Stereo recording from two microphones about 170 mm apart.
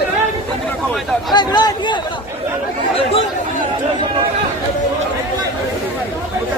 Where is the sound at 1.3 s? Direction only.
25° left (ahead or behind).